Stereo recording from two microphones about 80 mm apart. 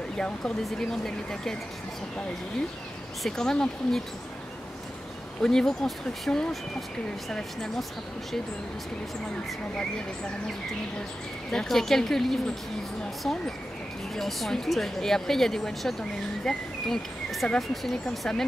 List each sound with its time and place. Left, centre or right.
0.2 s speech: centre
3.3 s speech: centre
5.4 s a woman's voice: centre
11.5 s a woman's voice: centre
14.1 s a woman's voice: centre